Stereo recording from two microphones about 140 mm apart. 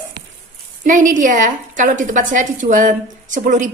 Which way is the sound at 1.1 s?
65° right (ahead or behind).